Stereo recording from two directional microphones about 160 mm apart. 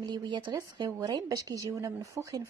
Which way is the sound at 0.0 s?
25° right (ahead or behind).